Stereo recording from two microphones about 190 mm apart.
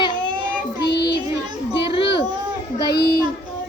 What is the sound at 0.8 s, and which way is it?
Child singing, 60° left (ahead or behind).